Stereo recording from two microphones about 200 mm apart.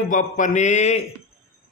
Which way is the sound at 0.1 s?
40° left (ahead or behind).